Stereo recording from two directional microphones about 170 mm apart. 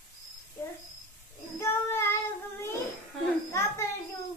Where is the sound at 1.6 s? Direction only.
15° left (ahead or behind).